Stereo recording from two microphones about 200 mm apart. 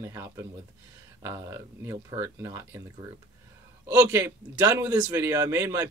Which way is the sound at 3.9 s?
15° right (ahead or behind).